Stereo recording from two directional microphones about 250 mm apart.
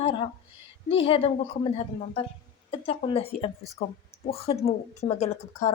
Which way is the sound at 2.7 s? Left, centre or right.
Left.